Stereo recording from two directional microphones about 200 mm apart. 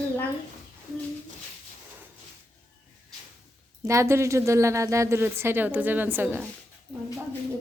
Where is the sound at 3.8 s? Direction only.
15° right (ahead or behind).